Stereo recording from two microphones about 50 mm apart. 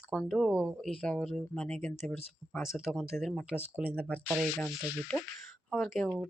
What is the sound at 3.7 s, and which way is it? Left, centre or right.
Speech, right.